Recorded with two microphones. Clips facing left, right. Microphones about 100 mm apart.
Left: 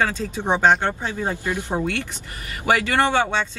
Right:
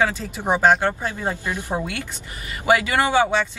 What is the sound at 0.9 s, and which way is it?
Speech, 15° left (ahead or behind).